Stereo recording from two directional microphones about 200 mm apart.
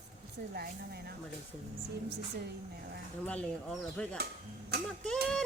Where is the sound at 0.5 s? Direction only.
50° right (ahead or behind).